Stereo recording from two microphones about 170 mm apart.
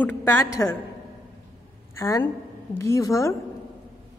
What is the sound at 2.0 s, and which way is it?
A woman's voice, 20° left (ahead or behind).